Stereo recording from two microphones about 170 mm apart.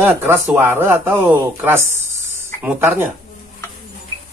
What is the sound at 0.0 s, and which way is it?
Speech, 15° right (ahead or behind).